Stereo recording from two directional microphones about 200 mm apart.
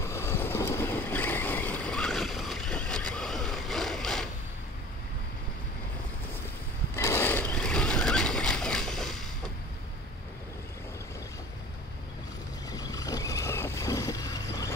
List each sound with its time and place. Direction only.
0.0 s vehicle: 15° left (ahead or behind)
7.0 s a sound: 15° left (ahead or behind)
12.6 s vehicle: 20° left (ahead or behind)